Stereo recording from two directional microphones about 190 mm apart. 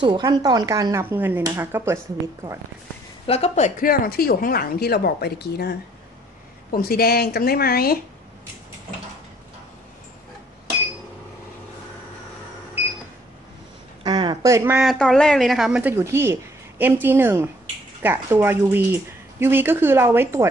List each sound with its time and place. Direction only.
0.0 s speech: 20° right (ahead or behind)
3.3 s speech: 35° left (ahead or behind); by 8.0 s 55° left (ahead or behind)
14.0 s speech: 25° right (ahead or behind)
14.8 s speech: centre (ahead or behind); by 20.4 s 15° right (ahead or behind)